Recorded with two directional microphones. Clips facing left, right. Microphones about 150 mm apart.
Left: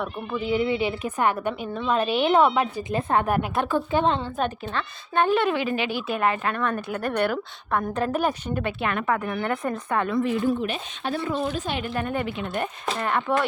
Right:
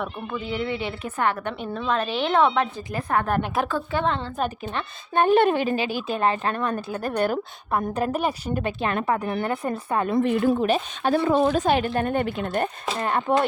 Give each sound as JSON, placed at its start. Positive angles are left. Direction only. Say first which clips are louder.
{"t": 0.0, "sound": "speech", "louder": "left 1 dB", "side_deg": 5}
{"t": 0.5, "sound": "a woman's voice", "louder": "left 5 dB", "side_deg": 15}
{"t": 2.9, "sound": "a woman's voice", "louder": "left 2 dB", "side_deg": 25}
{"t": 3.2, "sound": "a woman's voice", "louder": "even", "side_deg": 5}
{"t": 3.7, "sound": "a woman's voice", "louder": "left 2 dB", "side_deg": 20}
{"t": 4.4, "sound": "speech", "louder": "even", "side_deg": -5}
{"t": 5.1, "sound": "a woman's voice", "louder": "right 3 dB", "side_deg": -50}
{"t": 7.7, "sound": "a woman's voice", "louder": "even", "side_deg": -10}
{"t": 8.4, "sound": "a woman's voice", "louder": "right 1 dB", "side_deg": -35}
{"t": 10.2, "sound": "a woman's voice", "louder": "right 4 dB", "side_deg": -60}
{"t": 10.7, "sound": "a woman's voice", "louder": "right 7 dB", "side_deg": -45}
{"t": 11.7, "sound": "a woman's voice", "louder": "right 6 dB", "side_deg": -40}
{"t": 12.1, "sound": "speech", "louder": "right 3 dB", "side_deg": -50}
{"t": 13.0, "sound": "a woman's voice", "louder": "right 2 dB", "side_deg": -30}